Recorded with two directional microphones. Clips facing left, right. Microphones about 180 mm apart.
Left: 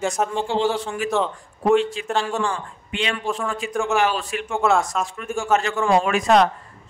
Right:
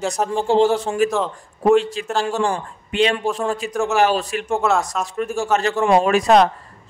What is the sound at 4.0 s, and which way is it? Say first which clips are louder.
Speech: right 4 dB; 40° right (ahead or behind).